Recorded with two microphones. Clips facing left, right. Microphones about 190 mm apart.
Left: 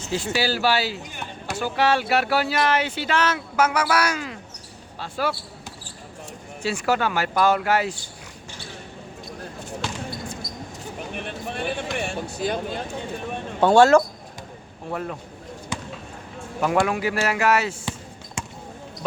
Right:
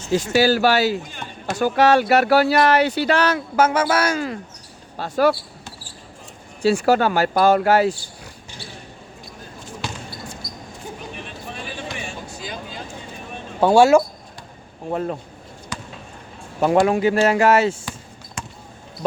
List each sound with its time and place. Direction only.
0.3 s speech: 45° right (ahead or behind)
6.6 s speech: 35° right (ahead or behind)
11.1 s a sound: 60° left (ahead or behind)
13.6 s speech: 10° right (ahead or behind)
14.8 s speech: 30° right (ahead or behind)
15.7 s a sound: 25° left (ahead or behind)
16.6 s speech: 30° right (ahead or behind)
18.4 s basketball bounce: 25° left (ahead or behind)